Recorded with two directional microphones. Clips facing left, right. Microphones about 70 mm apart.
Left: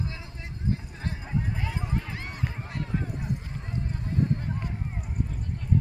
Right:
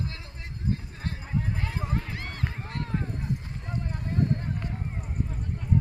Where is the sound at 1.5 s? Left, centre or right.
Centre.